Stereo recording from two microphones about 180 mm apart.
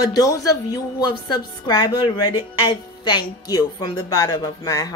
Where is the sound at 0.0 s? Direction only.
20° left (ahead or behind).